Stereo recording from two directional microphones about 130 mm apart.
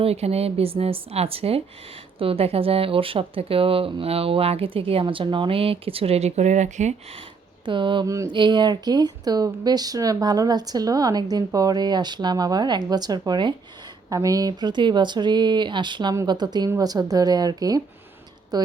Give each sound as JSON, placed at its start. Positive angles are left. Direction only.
{"t": 0.0, "sound": "speech", "side_deg": -50}
{"t": 7.6, "sound": "speech", "side_deg": -40}
{"t": 8.0, "sound": "a woman's voice", "side_deg": -25}
{"t": 8.3, "sound": "a woman's voice", "side_deg": -35}